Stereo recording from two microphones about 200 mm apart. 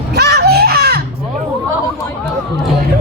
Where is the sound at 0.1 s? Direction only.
55° right (ahead or behind).